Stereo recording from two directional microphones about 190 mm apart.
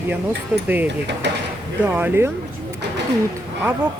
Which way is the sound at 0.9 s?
65° right (ahead or behind).